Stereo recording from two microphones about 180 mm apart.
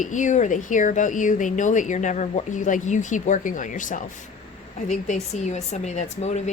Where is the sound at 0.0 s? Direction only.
45° left (ahead or behind).